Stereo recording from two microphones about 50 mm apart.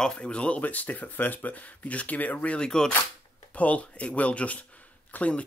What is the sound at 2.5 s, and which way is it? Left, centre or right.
Speech, centre.